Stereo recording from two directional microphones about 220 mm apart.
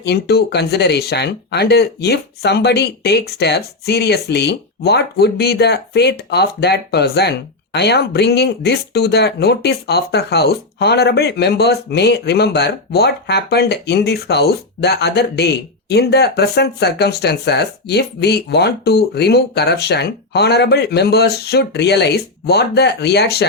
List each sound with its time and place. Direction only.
0.0 s speech: 50° left (ahead or behind)